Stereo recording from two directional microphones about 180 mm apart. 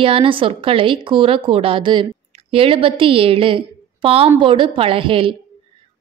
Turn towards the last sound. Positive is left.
turn(degrees=-30)  # may be behind; listen again after turning